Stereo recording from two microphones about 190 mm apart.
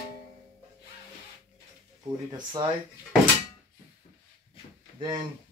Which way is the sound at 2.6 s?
20° right (ahead or behind).